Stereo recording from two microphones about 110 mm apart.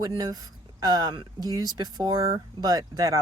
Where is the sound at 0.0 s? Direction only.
35° right (ahead or behind).